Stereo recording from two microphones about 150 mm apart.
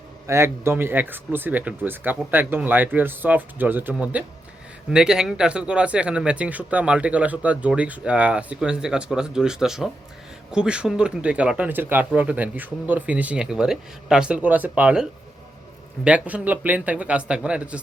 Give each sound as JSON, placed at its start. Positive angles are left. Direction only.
{"t": 0.3, "sound": "speech", "side_deg": -20}